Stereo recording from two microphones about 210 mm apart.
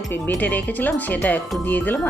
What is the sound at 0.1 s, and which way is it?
Speech, 10° left (ahead or behind).